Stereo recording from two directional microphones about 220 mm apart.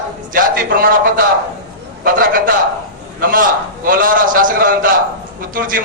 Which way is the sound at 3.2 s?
40° right (ahead or behind).